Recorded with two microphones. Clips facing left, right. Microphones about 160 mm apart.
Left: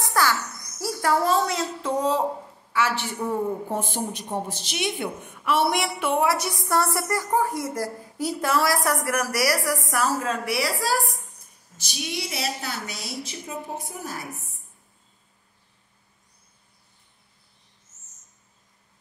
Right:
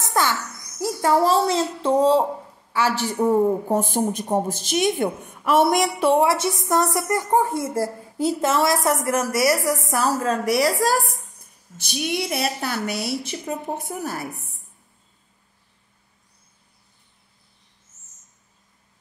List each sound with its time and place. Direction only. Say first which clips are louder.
0.0 s a child's voice: right 1 dB; 20° right (ahead or behind); by 11.1 s 45° right (ahead or behind)
11.7 s a woman's voice: right 6 dB; 55° right (ahead or behind)